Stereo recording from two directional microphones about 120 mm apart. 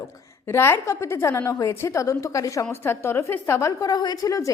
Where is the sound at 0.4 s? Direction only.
20° left (ahead or behind).